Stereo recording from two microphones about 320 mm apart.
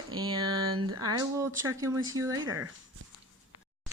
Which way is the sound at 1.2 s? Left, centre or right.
Centre.